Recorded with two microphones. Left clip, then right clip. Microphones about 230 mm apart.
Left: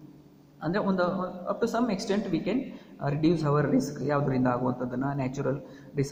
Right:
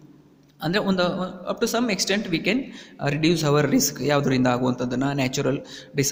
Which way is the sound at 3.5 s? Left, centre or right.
Right.